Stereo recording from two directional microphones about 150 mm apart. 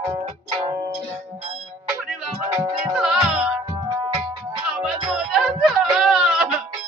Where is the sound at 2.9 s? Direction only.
5° right (ahead or behind).